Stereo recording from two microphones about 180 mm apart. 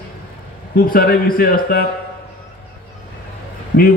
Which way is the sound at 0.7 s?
55° left (ahead or behind).